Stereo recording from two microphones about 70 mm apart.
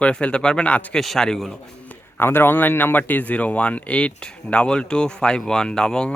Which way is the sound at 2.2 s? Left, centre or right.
Left.